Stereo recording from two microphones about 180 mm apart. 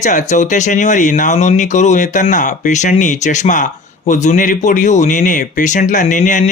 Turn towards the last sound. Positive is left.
turn(degrees=45)  # may be behind; listen again after turning